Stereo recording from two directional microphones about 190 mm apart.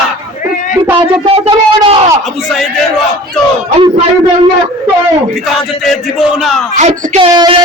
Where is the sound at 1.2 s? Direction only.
30° right (ahead or behind).